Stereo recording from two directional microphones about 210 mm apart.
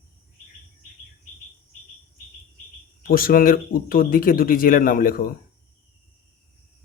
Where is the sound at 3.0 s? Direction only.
45° left (ahead or behind).